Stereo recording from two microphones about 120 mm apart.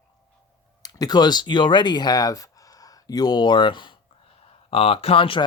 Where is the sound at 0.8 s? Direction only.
30° left (ahead or behind).